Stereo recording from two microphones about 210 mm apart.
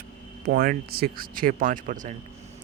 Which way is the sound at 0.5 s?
45° right (ahead or behind).